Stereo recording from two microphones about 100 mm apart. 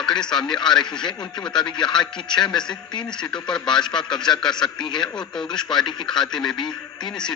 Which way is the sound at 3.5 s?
5° left (ahead or behind).